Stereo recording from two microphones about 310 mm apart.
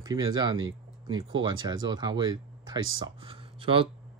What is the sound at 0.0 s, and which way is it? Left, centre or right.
Speech, centre.